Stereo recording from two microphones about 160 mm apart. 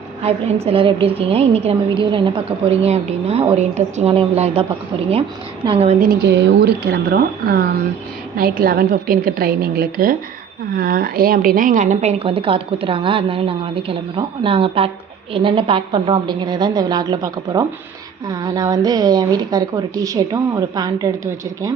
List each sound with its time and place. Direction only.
0.2 s a woman's voice: 40° right (ahead or behind)
5.6 s a woman's voice: 35° right (ahead or behind)
6.0 s a woman's voice: 75° right (ahead or behind); by 21.7 s 20° right (ahead or behind)